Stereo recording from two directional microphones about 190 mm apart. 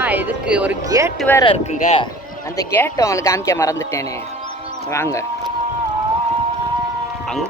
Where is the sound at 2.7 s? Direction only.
15° left (ahead or behind).